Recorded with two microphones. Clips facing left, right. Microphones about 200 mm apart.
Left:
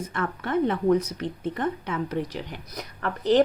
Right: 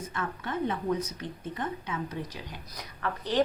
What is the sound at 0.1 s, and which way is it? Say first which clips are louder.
A woman's voice: left 8 dB; 65° left (ahead or behind).